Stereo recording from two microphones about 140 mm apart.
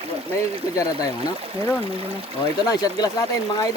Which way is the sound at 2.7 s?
30° left (ahead or behind).